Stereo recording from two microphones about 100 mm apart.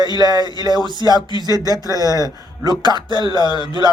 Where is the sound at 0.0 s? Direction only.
45° right (ahead or behind).